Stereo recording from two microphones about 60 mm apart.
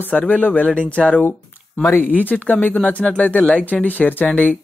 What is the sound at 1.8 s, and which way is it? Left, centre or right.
Speech, left.